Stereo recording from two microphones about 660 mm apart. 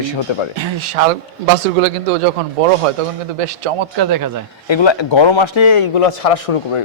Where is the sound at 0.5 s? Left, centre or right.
Right.